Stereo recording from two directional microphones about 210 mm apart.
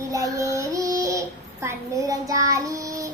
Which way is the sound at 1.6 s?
15° right (ahead or behind).